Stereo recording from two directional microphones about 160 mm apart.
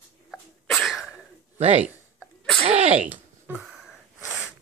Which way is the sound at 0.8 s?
Centre (ahead or behind).